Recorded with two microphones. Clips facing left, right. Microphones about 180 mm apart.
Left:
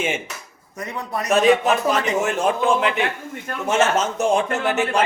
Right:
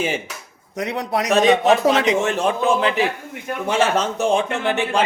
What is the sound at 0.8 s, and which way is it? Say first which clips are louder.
A man's voice: right 5 dB; 80° right.